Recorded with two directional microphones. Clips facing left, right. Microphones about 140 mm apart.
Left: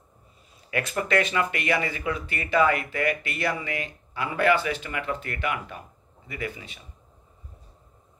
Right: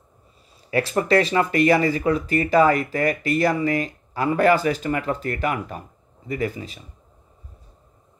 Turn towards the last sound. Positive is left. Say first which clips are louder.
# right 8 dB
turn(degrees=-35)  # may be behind; listen again after turning